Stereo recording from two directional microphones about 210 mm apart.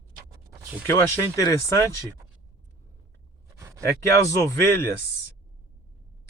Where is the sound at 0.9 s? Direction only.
15° left (ahead or behind).